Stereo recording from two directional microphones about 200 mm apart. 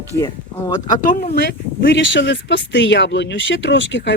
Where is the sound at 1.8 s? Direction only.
65° left (ahead or behind).